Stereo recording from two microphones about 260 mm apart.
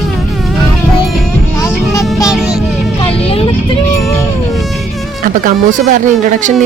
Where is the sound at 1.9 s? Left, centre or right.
Centre.